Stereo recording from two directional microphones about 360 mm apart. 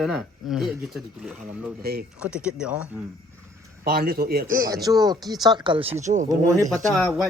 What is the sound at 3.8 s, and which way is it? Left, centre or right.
Speech, right.